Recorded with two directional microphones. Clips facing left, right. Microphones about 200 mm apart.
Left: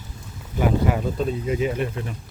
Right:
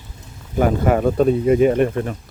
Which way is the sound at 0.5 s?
50° right (ahead or behind).